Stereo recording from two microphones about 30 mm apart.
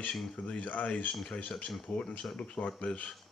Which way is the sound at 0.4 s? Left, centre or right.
Left.